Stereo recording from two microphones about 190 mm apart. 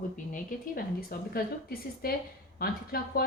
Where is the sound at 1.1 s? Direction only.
50° left (ahead or behind).